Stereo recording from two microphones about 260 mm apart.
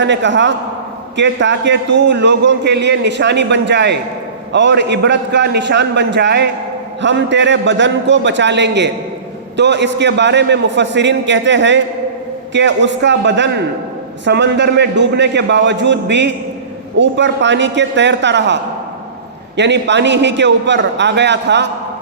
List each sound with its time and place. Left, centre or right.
0.0 s a man's voice: right